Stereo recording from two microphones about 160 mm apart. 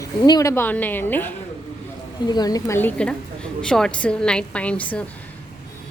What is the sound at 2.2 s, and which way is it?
A woman's voice, 25° left (ahead or behind).